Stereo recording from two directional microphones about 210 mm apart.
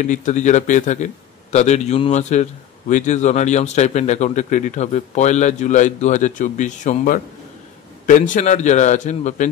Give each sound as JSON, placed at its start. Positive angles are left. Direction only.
{"t": 0.0, "sound": "speech", "side_deg": 35}